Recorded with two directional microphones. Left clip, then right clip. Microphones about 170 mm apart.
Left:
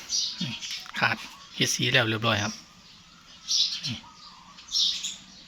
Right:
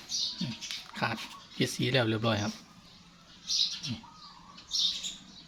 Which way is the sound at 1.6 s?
5° right (ahead or behind).